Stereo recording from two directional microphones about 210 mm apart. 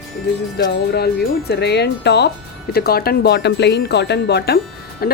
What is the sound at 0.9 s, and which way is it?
A woman's voice, 50° left (ahead or behind).